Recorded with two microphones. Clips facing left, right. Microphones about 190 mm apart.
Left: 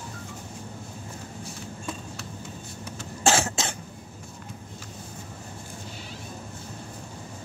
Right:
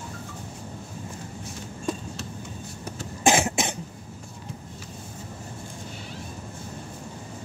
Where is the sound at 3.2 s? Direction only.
15° right (ahead or behind).